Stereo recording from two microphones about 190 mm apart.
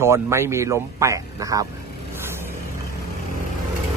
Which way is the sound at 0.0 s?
15° right (ahead or behind).